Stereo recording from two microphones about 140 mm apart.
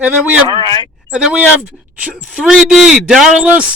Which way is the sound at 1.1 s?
5° right (ahead or behind).